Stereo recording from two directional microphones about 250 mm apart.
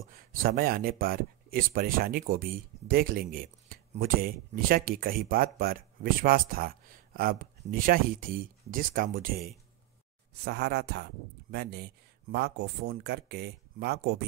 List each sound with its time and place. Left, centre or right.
0.1 s speech: right